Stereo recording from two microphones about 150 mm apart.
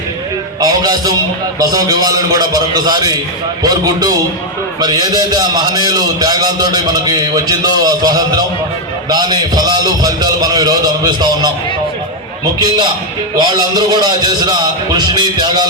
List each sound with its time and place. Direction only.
0.6 s a man's voice: 25° right (ahead or behind)
13.4 s a man's voice: 25° right (ahead or behind)